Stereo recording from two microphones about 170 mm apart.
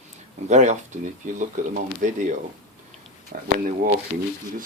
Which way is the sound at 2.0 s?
45° right (ahead or behind).